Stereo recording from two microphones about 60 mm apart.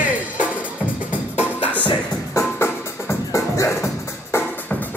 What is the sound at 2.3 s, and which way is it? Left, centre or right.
Music, left.